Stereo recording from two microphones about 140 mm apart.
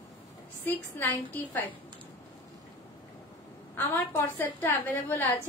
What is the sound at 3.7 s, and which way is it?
A woman's voice, 15° left (ahead or behind).